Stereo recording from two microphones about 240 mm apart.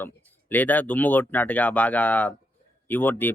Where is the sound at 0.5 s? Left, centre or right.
Centre.